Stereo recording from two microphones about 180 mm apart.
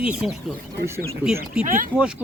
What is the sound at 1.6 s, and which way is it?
Speech, 50° right (ahead or behind).